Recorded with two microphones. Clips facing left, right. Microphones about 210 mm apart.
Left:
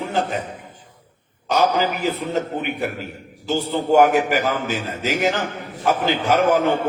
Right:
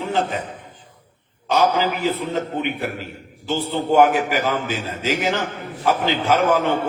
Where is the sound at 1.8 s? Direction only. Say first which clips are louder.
Right 1 dB; 45° left (ahead or behind).